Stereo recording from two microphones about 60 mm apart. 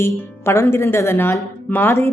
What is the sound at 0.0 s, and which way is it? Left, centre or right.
Speech, left.